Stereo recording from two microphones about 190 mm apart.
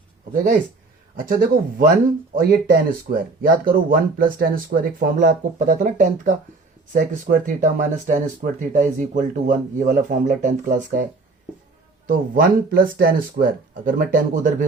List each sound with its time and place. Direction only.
1.1 s speech: 50° right (ahead or behind)
12.0 s speech: 50° right (ahead or behind)